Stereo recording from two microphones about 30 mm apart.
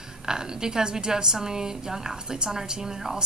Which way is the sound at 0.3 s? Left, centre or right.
Right.